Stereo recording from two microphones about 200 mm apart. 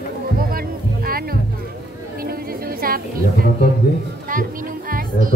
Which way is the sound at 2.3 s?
45° right (ahead or behind).